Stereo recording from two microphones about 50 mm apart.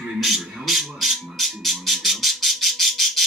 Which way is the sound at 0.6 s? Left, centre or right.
Centre.